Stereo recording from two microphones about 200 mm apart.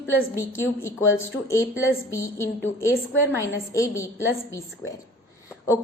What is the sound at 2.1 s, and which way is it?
Speech, 15° left (ahead or behind).